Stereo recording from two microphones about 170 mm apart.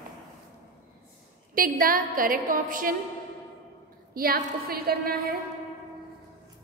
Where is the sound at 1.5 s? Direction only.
55° right (ahead or behind).